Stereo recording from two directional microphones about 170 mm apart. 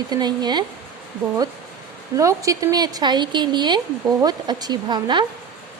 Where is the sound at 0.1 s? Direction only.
25° right (ahead or behind).